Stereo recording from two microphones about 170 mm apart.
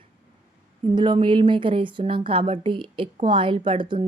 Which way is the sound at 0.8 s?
30° right (ahead or behind).